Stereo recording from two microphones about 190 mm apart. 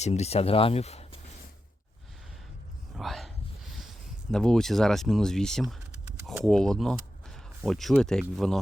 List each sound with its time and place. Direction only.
0.0 s speech: 35° left (ahead or behind)
2.9 s a sound: centre (ahead or behind)
4.3 s speech: 5° left (ahead or behind)